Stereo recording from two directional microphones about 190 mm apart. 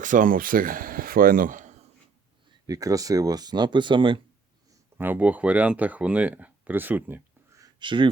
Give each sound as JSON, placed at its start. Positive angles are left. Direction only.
{"t": 0.0, "sound": "speech", "side_deg": -45}
{"t": 2.6, "sound": "speech", "side_deg": -20}
{"t": 4.9, "sound": "speech", "side_deg": -10}